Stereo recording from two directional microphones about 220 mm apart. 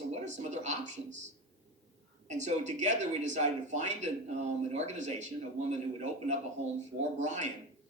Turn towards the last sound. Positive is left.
turn(degrees=-35)  # may be behind; listen again after turning